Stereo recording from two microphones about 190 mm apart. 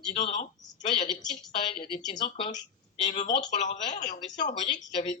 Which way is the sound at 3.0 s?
40° left (ahead or behind).